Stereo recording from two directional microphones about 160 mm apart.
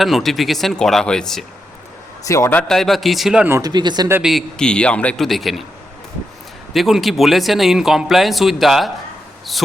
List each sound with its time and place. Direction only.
0.0 s speech: centre (ahead or behind)
2.2 s speech: 20° left (ahead or behind); by 3.5 s 5° right (ahead or behind)
3.5 s speech: 25° right (ahead or behind)
4.1 s speech: 5° right (ahead or behind)
6.7 s speech: centre (ahead or behind)